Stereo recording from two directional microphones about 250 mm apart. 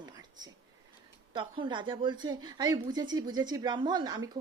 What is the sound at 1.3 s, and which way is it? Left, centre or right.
A woman's voice, centre.